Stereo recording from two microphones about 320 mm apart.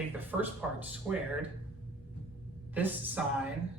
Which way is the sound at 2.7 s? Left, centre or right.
Centre.